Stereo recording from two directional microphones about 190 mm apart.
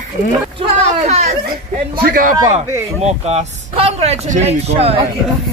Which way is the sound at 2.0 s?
50° right (ahead or behind).